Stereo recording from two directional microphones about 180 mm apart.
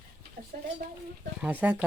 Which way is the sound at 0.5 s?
50° right (ahead or behind).